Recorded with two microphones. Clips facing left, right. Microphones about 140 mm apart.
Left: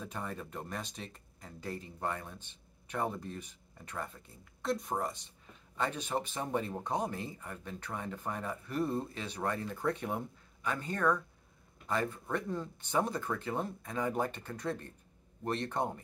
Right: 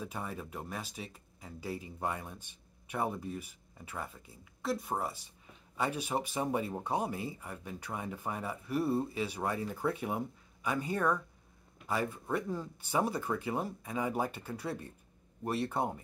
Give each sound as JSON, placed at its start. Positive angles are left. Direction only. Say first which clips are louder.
{"t": 0.0, "sound": "speech", "louder": "right 1 dB", "side_deg": -10}